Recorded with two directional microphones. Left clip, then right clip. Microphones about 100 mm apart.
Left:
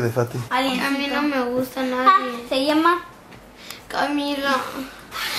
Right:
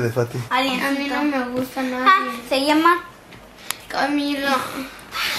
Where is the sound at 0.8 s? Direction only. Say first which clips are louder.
Even; 30° left (ahead or behind).